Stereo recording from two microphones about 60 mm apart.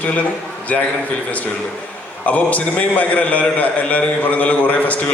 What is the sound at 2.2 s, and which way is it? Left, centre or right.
A man's voice, left.